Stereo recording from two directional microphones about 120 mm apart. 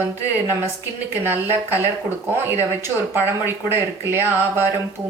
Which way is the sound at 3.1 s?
20° right (ahead or behind).